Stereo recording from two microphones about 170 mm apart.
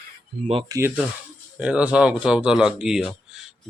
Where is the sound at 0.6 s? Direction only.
20° right (ahead or behind).